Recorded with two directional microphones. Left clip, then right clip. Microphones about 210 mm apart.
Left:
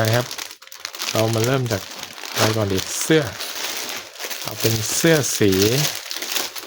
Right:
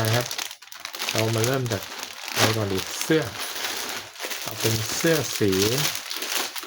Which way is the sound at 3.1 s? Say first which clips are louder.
Left 5 dB; 35° left (ahead or behind).